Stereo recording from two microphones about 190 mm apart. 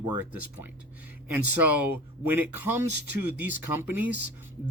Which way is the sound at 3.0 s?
65° right (ahead or behind).